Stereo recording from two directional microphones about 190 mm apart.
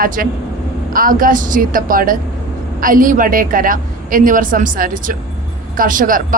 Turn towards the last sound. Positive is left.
turn(degrees=-45)  # may be behind; listen again after turning